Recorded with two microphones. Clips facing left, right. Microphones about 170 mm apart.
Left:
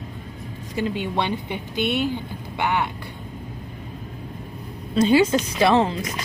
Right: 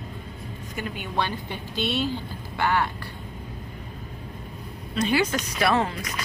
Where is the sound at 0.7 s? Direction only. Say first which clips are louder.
Left 5 dB; 25° left (ahead or behind).